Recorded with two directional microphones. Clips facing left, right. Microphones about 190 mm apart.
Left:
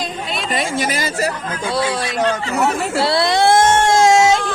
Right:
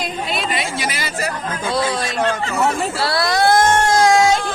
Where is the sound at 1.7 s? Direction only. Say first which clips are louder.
Even; 10° left (ahead or behind).